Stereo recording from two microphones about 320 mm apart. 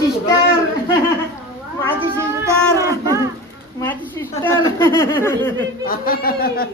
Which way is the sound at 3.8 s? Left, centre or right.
Centre.